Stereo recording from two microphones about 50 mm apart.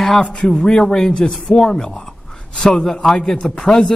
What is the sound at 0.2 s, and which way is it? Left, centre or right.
Speech, centre.